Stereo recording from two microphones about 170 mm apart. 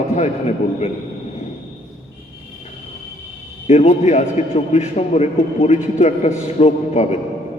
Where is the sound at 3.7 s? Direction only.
40° left (ahead or behind).